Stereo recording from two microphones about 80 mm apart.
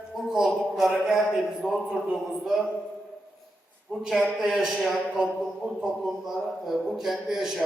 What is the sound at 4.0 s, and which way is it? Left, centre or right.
A man's voice, centre.